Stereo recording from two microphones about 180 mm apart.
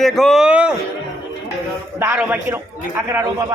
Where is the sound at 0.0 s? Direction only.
Centre (ahead or behind).